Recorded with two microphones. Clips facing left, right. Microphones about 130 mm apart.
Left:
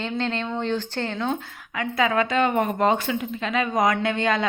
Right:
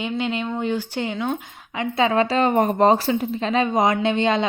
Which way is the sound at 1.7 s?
25° right (ahead or behind).